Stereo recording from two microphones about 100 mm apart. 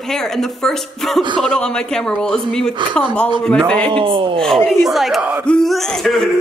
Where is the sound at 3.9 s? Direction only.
55° right (ahead or behind).